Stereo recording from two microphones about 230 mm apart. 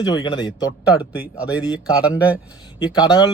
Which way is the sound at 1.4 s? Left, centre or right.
Centre.